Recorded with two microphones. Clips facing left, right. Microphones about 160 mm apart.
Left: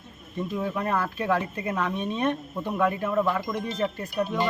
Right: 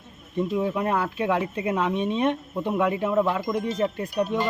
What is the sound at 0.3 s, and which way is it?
Speech, 15° right (ahead or behind).